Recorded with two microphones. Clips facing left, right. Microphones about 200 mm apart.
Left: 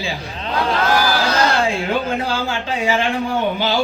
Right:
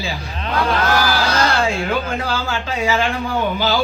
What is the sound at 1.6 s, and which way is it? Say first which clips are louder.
Speech: left 1 dB; 30° left (ahead or behind).